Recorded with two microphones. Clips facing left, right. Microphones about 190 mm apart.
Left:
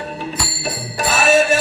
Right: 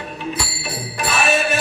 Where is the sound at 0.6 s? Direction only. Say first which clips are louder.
Left 6 dB; 45° left (ahead or behind).